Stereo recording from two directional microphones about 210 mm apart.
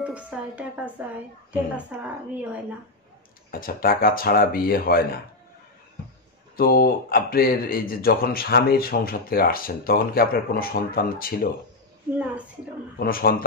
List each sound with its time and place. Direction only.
0.0 s a woman's voice: 5° right (ahead or behind)
3.5 s speech: 45° left (ahead or behind)
6.5 s speech: 45° left (ahead or behind)
13.0 s speech: 45° left (ahead or behind)